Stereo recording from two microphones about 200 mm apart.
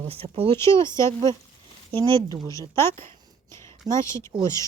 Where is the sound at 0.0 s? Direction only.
30° right (ahead or behind).